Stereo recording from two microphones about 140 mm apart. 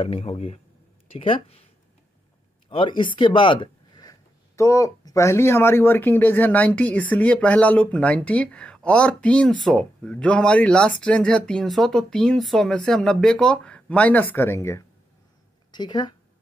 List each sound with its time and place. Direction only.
0.0 s speech: 45° left (ahead or behind)
2.7 s speech: 35° left (ahead or behind); by 14.9 s 20° left (ahead or behind)
15.7 s speech: 30° left (ahead or behind)